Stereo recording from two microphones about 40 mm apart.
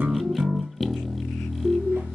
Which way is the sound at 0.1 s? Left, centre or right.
Centre.